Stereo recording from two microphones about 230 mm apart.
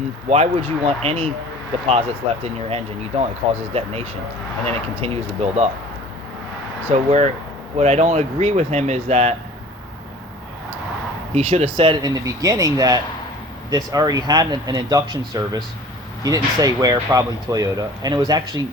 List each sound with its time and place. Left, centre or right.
0.3 s speech: right
6.9 s speech: right
11.3 s speech: right